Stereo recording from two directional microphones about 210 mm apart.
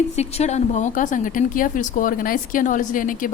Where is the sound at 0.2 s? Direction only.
30° left (ahead or behind).